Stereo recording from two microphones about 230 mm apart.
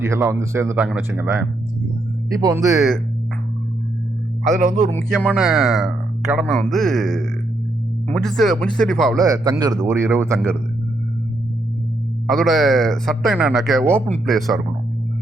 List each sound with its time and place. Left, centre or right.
0.0 s speech: centre
4.4 s speech: right
4.9 s speech: centre
9.2 s speech: centre
12.3 s speech: centre